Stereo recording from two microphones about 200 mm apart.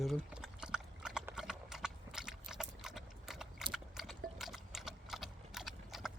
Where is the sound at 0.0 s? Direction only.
Centre (ahead or behind).